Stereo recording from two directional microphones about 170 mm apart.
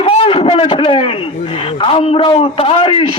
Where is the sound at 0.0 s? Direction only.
35° left (ahead or behind).